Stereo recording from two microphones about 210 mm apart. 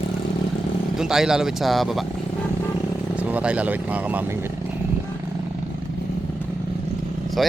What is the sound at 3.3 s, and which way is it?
Speech, 5° right (ahead or behind).